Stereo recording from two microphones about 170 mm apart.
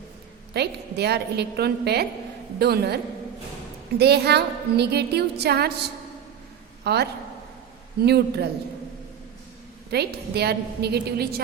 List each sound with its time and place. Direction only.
0.5 s a woman's voice: 75° right (ahead or behind)
6.8 s a woman's voice: 75° right (ahead or behind)
9.9 s a woman's voice: 70° right (ahead or behind)